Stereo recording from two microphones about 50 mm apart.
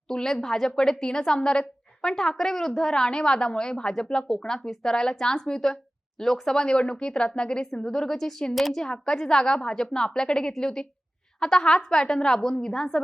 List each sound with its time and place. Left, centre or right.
0.1 s a woman's voice: centre